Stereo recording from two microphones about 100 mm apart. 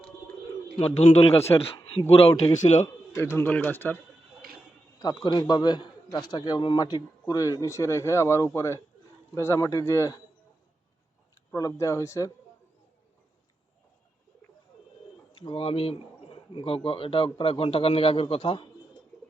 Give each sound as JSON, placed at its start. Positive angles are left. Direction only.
{"t": 0.8, "sound": "speech", "side_deg": 75}
{"t": 3.2, "sound": "speech", "side_deg": 25}
{"t": 4.9, "sound": "a man's voice", "side_deg": 45}
{"t": 11.5, "sound": "speech", "side_deg": 30}
{"t": 15.4, "sound": "speech", "side_deg": 65}